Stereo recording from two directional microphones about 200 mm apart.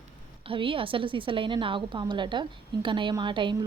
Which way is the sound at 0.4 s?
25° right (ahead or behind).